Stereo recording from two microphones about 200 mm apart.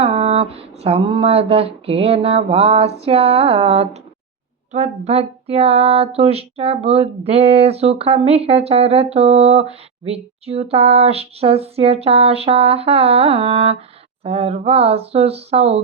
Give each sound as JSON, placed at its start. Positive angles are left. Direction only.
{"t": 0.0, "sound": "speech", "side_deg": -30}